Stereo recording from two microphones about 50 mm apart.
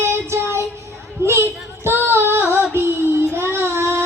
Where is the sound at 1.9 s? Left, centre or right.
Right.